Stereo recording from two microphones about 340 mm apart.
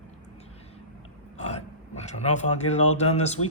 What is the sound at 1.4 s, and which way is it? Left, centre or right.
Speech, centre.